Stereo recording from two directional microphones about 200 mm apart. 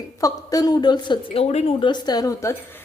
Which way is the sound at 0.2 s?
20° left (ahead or behind).